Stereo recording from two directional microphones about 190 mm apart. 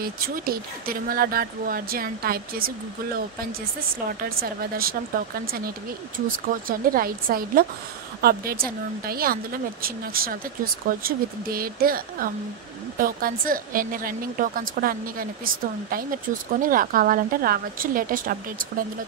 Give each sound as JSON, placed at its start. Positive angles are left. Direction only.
{"t": 0.0, "sound": "speech", "side_deg": -50}
{"t": 4.1, "sound": "speech", "side_deg": -50}
{"t": 6.1, "sound": "speech", "side_deg": -50}